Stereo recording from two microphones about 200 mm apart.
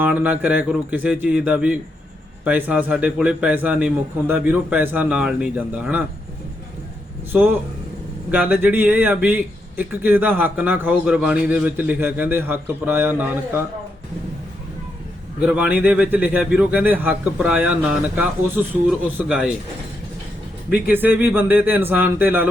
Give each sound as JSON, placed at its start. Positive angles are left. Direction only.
{"t": 0.0, "sound": "a man's voice", "side_deg": -10}
{"t": 7.3, "sound": "a man's voice", "side_deg": -5}
{"t": 15.4, "sound": "a man's voice", "side_deg": -5}
{"t": 20.7, "sound": "a man's voice", "side_deg": -10}